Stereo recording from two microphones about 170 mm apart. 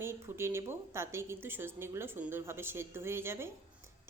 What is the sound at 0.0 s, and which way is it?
A woman's voice, 15° right (ahead or behind).